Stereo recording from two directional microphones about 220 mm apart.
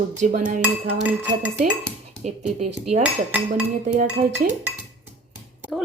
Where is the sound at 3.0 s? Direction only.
5° right (ahead or behind).